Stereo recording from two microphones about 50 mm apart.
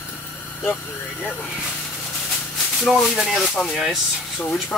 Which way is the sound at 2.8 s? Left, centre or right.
Centre.